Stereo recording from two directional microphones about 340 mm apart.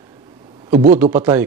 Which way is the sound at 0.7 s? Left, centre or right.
Centre.